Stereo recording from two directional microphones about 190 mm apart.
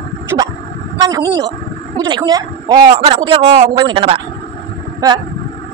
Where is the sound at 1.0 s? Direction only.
20° right (ahead or behind).